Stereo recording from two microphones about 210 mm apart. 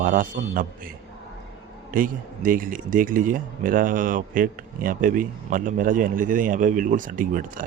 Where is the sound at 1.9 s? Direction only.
40° right (ahead or behind).